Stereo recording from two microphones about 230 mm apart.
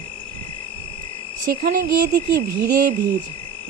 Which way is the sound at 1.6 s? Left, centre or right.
Right.